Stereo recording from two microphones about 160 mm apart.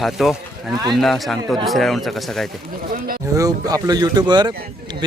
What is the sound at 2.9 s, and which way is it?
Speech, 60° right (ahead or behind).